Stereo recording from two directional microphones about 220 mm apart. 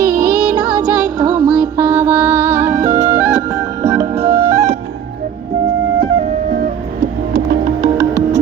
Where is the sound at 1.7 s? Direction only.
10° right (ahead or behind).